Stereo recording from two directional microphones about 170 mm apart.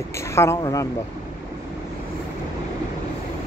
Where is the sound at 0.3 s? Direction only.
15° left (ahead or behind).